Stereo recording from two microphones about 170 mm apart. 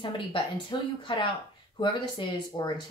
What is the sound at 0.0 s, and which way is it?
Speech, 30° left (ahead or behind).